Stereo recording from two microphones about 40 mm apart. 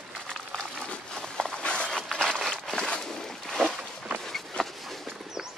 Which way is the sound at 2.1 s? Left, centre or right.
Centre.